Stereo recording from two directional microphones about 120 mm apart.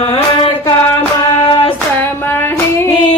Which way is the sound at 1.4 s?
45° left (ahead or behind).